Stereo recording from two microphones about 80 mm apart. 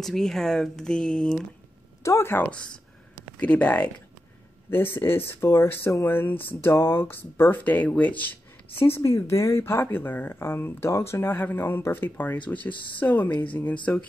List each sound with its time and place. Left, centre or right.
0.0 s speech: centre
2.0 s speech: left
2.3 s speech: centre
4.6 s speech: left
6.0 s speech: left
8.7 s speech: left